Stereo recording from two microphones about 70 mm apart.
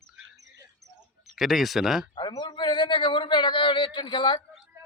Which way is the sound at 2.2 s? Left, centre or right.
Left.